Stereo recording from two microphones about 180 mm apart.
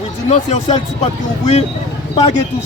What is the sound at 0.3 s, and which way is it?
Speech, 40° left (ahead or behind).